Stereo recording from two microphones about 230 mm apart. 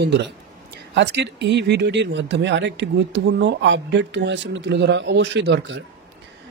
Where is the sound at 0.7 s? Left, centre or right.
Right.